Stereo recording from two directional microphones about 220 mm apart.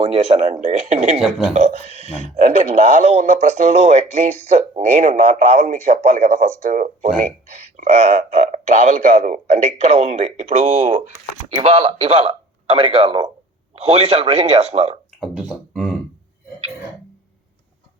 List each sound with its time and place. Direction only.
0.1 s speech: 30° right (ahead or behind)
1.2 s speech: 5° right (ahead or behind)
1.5 s speech: 30° right (ahead or behind)
11.5 s a man's voice: 25° right (ahead or behind)
15.2 s beatboxing: centre (ahead or behind)